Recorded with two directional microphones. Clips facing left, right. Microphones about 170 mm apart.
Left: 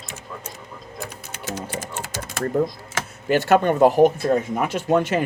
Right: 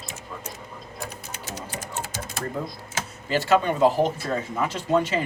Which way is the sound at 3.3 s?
55° left (ahead or behind).